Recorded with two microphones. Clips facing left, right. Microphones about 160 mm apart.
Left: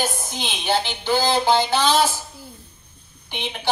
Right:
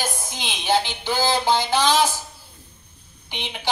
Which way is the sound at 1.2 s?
10° right (ahead or behind).